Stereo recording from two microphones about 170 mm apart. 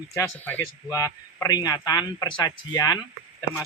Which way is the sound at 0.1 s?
10° left (ahead or behind).